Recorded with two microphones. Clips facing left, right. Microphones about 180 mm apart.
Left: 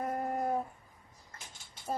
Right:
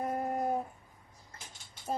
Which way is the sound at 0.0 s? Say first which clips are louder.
Right 1 dB; 10° right (ahead or behind).